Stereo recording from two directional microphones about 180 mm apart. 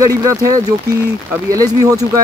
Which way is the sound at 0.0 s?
20° right (ahead or behind).